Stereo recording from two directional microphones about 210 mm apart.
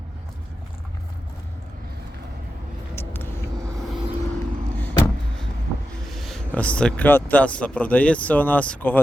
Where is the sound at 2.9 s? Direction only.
10° left (ahead or behind).